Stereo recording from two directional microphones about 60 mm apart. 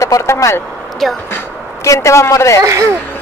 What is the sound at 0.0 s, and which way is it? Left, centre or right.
Speech, left.